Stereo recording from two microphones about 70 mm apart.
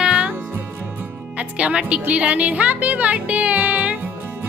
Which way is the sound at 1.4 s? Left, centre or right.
Centre.